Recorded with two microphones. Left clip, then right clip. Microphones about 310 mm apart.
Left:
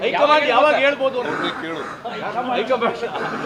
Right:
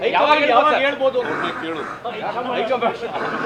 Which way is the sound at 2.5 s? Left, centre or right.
Left.